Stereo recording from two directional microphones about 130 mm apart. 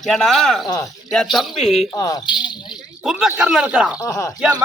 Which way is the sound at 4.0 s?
25° left (ahead or behind).